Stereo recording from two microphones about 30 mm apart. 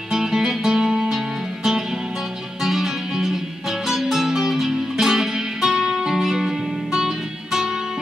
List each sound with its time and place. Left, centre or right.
0.1 s music: centre